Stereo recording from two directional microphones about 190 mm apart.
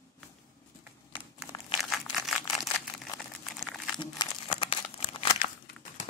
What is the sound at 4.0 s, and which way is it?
Crumpling, 25° left (ahead or behind).